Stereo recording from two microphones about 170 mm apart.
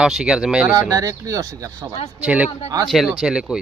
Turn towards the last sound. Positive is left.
turn(degrees=-5)  # may be behind; listen again after turning